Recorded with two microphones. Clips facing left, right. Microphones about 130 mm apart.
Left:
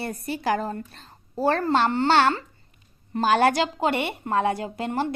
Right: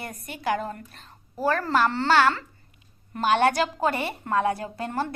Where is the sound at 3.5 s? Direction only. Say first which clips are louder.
Left 1 dB; 25° left (ahead or behind).